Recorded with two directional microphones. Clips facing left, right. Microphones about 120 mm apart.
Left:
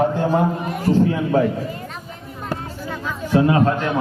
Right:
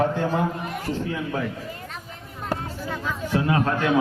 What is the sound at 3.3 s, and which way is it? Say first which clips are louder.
Speech: left 7 dB; 30° left (ahead or behind).